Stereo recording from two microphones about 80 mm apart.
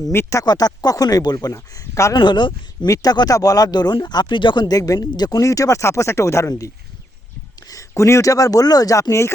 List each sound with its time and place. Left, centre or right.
0.1 s speech: left
0.4 s speech: left
1.5 s speech: left
2.1 s speech: left
2.8 s speech: left
4.7 s speech: left
4.9 s speech: left
7.7 s speech: left